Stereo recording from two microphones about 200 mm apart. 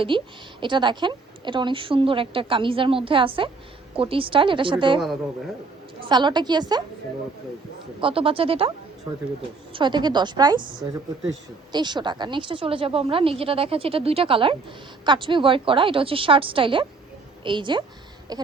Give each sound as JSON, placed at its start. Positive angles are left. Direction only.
{"t": 0.1, "sound": "a woman's voice", "side_deg": -25}
{"t": 6.1, "sound": "a woman's voice", "side_deg": -20}
{"t": 8.0, "sound": "a woman's voice", "side_deg": -25}
{"t": 9.7, "sound": "a woman's voice", "side_deg": -20}